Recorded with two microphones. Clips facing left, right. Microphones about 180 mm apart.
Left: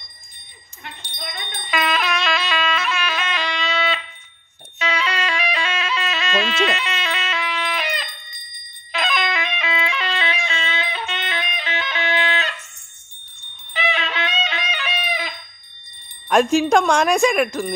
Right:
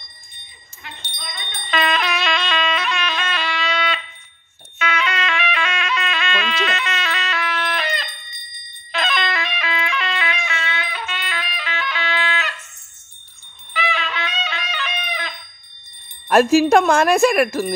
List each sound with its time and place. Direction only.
1.7 s music: 5° left (ahead or behind)
3.6 s fire alarm: centre (ahead or behind)
4.7 s music: 35° left (ahead or behind)
13.7 s music: 25° left (ahead or behind)
16.3 s speech: 5° right (ahead or behind)